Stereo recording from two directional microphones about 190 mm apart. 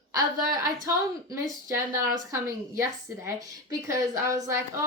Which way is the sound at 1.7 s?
15° right (ahead or behind).